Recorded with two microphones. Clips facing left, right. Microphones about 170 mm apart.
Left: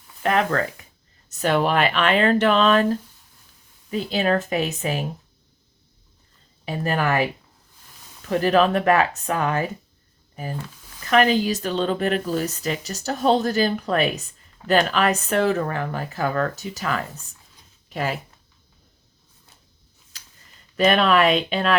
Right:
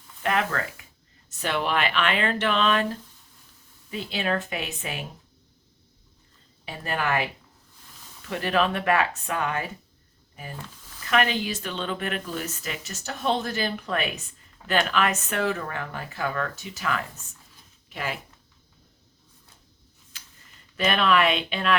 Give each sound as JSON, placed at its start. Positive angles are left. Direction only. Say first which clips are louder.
{"t": 0.2, "sound": "speech", "louder": "left 5 dB", "side_deg": 35}
{"t": 6.7, "sound": "speech", "louder": "left 5 dB", "side_deg": 40}
{"t": 8.3, "sound": "speech", "louder": "left 7 dB", "side_deg": 40}
{"t": 11.0, "sound": "speech", "louder": "left 6 dB", "side_deg": 35}
{"t": 20.1, "sound": "a sound", "louder": "left 1 dB", "side_deg": 40}
{"t": 20.7, "sound": "speech", "louder": "left 5 dB", "side_deg": 40}